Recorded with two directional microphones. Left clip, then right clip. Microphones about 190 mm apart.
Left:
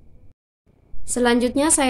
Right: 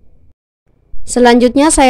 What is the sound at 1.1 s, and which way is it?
Speech, 50° right (ahead or behind).